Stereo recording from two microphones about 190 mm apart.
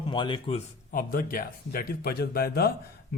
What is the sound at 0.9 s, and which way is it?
Speech, 50° left (ahead or behind).